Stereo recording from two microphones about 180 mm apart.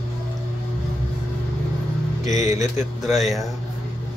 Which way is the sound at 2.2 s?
40° left (ahead or behind).